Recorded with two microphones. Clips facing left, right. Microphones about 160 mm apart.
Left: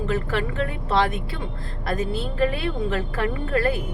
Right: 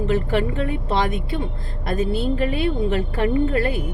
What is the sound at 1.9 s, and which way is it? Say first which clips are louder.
Speech: right 5 dB; 25° right (ahead or behind).